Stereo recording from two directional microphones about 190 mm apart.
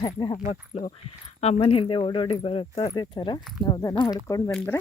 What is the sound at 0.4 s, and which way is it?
Speech, 35° left (ahead or behind).